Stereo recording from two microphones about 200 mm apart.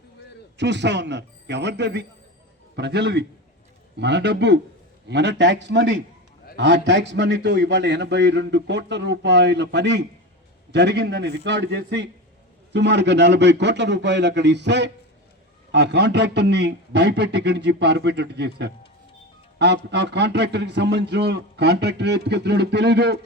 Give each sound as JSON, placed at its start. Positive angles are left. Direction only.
{"t": 0.5, "sound": "a man's voice", "side_deg": -60}